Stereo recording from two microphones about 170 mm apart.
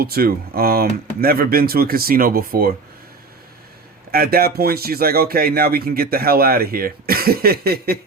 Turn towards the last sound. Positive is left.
turn(degrees=-65)  # may be behind; listen again after turning